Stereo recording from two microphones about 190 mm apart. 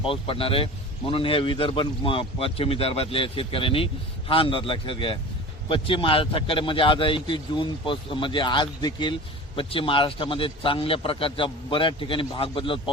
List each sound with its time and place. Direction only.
0.0 s a man's voice: 30° left (ahead or behind)